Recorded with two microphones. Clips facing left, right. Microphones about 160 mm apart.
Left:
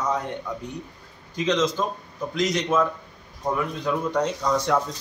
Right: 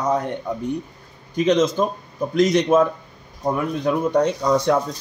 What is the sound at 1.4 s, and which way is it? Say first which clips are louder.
A man's voice: right 5 dB; 50° right (ahead or behind).